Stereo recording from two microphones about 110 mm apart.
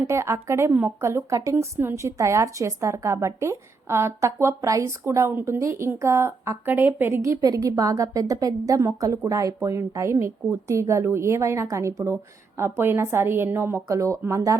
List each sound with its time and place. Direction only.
0.0 s a woman's voice: 25° right (ahead or behind)